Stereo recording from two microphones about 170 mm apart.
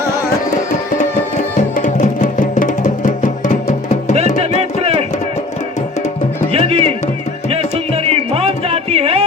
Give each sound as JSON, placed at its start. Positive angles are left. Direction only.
{"t": 0.9, "sound": "music", "side_deg": 55}
{"t": 4.5, "sound": "music", "side_deg": -35}
{"t": 6.5, "sound": "music", "side_deg": -35}
{"t": 8.0, "sound": "music", "side_deg": -35}